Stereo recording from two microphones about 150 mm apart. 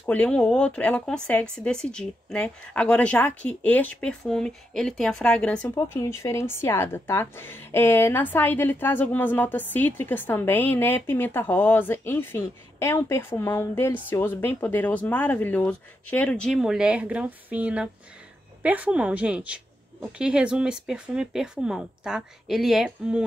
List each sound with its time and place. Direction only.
0.0 s a woman's voice: 10° left (ahead or behind)
5.9 s a woman's voice: 20° left (ahead or behind); by 23.2 s 5° right (ahead or behind)